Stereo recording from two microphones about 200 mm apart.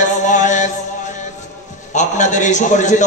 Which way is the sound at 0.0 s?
40° left (ahead or behind).